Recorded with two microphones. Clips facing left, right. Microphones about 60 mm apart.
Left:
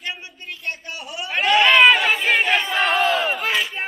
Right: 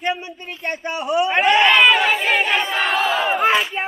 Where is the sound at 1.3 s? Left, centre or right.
Right.